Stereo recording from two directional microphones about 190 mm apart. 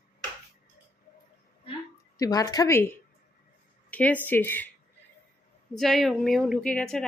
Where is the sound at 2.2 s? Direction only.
20° left (ahead or behind).